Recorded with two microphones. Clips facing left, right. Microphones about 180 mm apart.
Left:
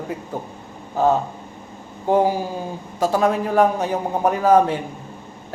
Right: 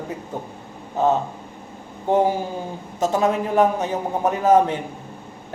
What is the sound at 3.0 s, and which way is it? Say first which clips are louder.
A man's voice: left 1 dB; 20° right (ahead or behind).